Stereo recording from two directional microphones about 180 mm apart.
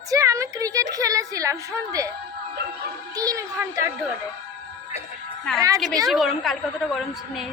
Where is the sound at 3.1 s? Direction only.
20° right (ahead or behind).